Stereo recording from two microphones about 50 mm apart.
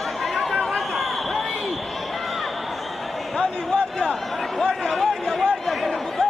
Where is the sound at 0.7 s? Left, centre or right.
Centre.